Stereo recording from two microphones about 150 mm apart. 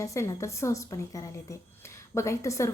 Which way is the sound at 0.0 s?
20° left (ahead or behind).